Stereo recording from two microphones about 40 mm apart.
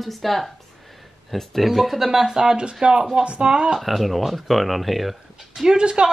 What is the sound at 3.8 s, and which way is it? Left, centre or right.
Speech, centre.